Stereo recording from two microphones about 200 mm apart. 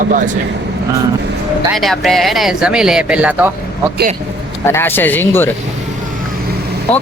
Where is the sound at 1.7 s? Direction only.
Centre (ahead or behind).